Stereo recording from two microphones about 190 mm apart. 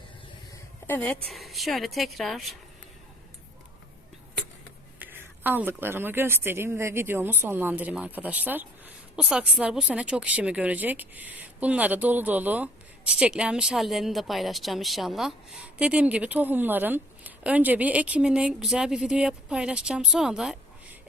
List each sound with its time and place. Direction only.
0.5 s a woman's voice: 10° left (ahead or behind)
4.9 s a woman's voice: 10° right (ahead or behind)